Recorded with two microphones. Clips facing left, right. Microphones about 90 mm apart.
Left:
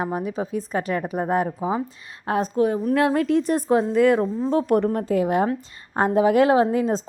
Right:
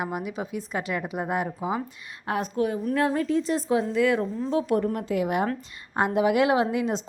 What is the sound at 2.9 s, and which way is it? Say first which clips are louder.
A woman's voice: left 4 dB; 65° left (ahead or behind).